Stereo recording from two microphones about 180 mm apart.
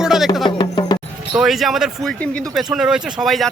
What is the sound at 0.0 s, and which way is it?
Music, centre (ahead or behind).